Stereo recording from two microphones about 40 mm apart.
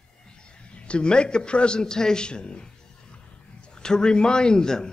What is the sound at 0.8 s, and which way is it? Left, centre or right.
A man's voice, left.